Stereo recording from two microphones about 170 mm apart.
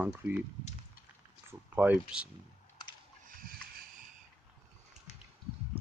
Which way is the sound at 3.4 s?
60° right (ahead or behind).